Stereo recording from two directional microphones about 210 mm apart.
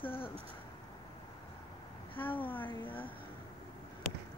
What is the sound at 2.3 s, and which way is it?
Speech, 10° left (ahead or behind).